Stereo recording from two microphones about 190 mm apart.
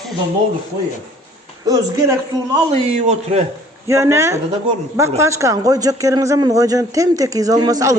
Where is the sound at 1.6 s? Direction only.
20° right (ahead or behind); by 3.4 s 35° right (ahead or behind).